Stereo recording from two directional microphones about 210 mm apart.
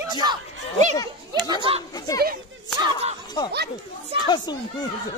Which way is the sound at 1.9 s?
20° left (ahead or behind).